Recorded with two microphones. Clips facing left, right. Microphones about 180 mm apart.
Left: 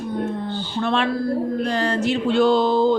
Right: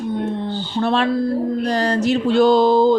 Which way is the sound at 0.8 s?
35° right (ahead or behind).